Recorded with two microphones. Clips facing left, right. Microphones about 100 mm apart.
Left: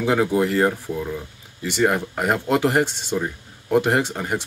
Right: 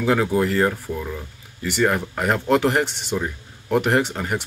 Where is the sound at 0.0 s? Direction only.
15° left (ahead or behind).